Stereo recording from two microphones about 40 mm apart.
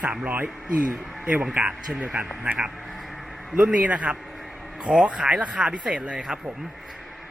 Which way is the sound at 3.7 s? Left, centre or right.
Right.